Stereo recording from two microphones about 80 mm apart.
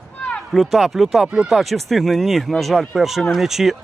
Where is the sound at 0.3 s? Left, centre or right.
Centre.